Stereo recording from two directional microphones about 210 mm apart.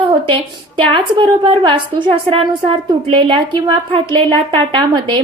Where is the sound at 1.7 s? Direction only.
25° right (ahead or behind).